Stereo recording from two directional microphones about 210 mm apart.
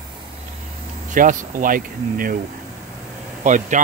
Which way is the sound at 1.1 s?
40° right (ahead or behind).